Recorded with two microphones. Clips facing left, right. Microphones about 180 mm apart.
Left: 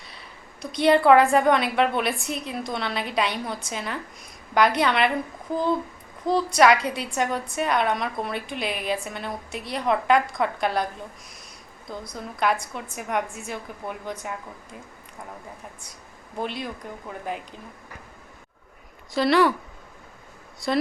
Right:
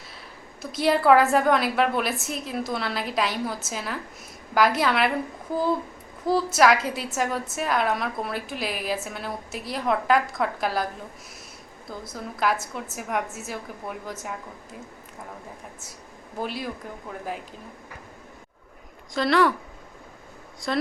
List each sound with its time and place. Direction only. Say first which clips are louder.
0.1 s a woman's voice: right 2 dB; 5° right (ahead or behind)
6.2 s a woman's voice: left 1 dB; 5° right (ahead or behind)
11.9 s a woman's voice: even; 5° right (ahead or behind)
16.4 s a woman's voice: even; 5° right (ahead or behind)
19.1 s a woman's voice: left 1 dB; centre (ahead or behind)